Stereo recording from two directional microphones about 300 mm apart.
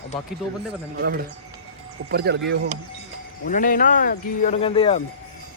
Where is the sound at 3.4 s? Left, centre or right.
Left.